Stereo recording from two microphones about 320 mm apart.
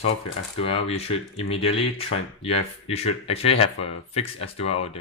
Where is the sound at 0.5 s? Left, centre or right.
Centre.